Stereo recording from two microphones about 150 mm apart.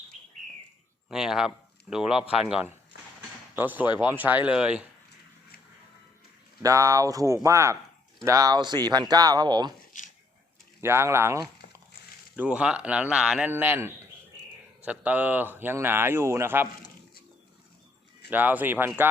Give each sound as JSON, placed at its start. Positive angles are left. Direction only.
{"t": 1.1, "sound": "a man's voice", "side_deg": -5}
{"t": 6.6, "sound": "speech", "side_deg": -20}
{"t": 10.0, "sound": "a sound", "side_deg": 60}
{"t": 10.8, "sound": "speech", "side_deg": -15}
{"t": 12.4, "sound": "speech", "side_deg": -5}
{"t": 18.3, "sound": "speech", "side_deg": -10}